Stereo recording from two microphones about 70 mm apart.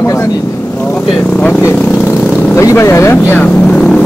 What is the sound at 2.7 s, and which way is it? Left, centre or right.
Speech, left.